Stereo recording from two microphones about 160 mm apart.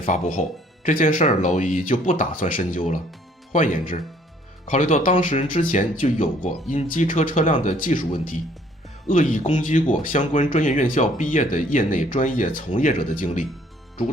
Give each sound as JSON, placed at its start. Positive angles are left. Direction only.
{"t": 0.0, "sound": "speech", "side_deg": 55}